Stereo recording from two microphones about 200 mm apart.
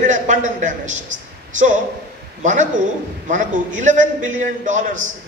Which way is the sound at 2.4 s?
35° right (ahead or behind).